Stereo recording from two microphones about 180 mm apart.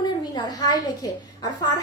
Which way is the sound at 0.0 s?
20° left (ahead or behind).